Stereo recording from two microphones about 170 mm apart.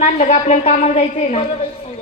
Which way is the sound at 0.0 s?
45° left (ahead or behind).